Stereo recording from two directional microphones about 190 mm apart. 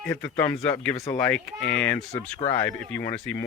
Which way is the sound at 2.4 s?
30° left (ahead or behind).